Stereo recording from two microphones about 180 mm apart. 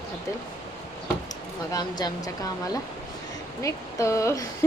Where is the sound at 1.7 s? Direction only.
20° left (ahead or behind).